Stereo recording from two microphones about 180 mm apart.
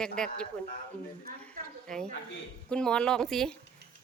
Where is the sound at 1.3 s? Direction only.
50° right (ahead or behind).